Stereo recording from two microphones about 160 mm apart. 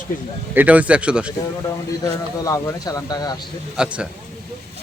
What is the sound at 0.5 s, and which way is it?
Speech, 10° right (ahead or behind).